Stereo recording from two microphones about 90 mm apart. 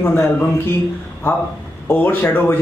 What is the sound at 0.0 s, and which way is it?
Speech, 25° left (ahead or behind).